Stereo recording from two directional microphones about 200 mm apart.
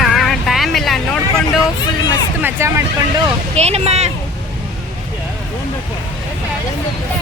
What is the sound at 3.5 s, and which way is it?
Speech, 30° right (ahead or behind).